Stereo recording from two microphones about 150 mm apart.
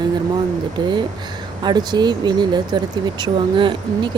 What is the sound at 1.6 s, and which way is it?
Speech, 30° right (ahead or behind).